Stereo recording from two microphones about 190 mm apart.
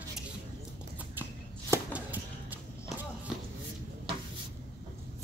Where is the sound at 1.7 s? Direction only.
10° right (ahead or behind).